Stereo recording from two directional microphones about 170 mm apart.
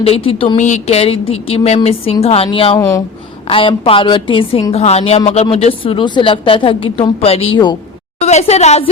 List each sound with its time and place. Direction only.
0.0 s a woman's voice: 35° left (ahead or behind)
2.7 s speech: 20° left (ahead or behind)
3.4 s a woman's voice: 30° left (ahead or behind)
8.2 s a woman's voice: 40° left (ahead or behind)